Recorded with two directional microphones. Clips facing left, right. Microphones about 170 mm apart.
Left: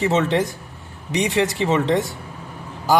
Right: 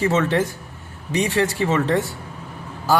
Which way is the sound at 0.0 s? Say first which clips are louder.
Even; 20° left (ahead or behind).